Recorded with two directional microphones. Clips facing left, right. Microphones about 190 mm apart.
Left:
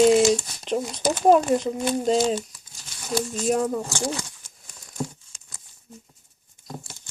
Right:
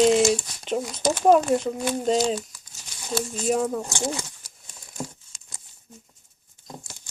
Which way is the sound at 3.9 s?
20° right (ahead or behind).